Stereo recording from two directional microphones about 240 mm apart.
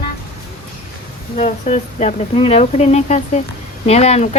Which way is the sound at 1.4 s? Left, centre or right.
Left.